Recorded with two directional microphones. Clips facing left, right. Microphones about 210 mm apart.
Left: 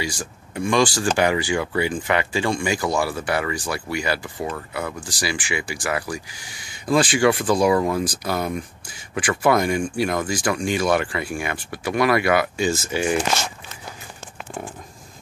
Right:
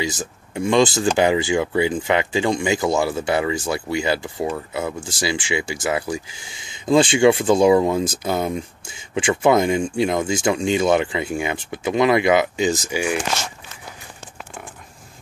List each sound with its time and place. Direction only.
0.0 s speech: 20° right (ahead or behind)